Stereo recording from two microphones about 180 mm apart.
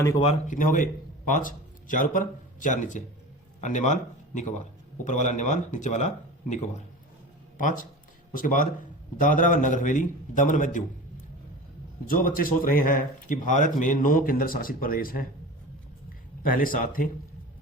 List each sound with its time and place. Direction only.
0.0 s speech: 20° left (ahead or behind)
0.4 s a man's voice: 45° left (ahead or behind)
5.0 s speech: 40° left (ahead or behind)
8.3 s speech: 50° left (ahead or behind)
12.0 s speech: 50° left (ahead or behind)
16.4 s speech: 50° left (ahead or behind)